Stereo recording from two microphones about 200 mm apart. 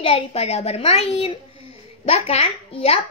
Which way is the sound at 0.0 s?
30° left (ahead or behind).